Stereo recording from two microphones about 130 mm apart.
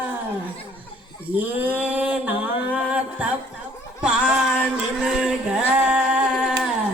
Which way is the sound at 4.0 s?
5° right (ahead or behind).